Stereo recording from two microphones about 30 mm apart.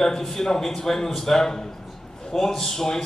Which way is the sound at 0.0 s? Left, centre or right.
Centre.